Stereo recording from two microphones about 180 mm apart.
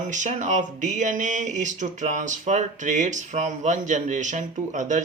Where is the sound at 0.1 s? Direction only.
45° right (ahead or behind).